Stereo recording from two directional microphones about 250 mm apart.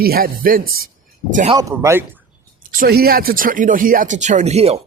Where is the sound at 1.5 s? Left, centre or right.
Centre.